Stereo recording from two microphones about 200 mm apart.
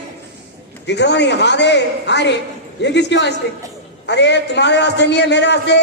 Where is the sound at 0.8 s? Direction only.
60° left (ahead or behind).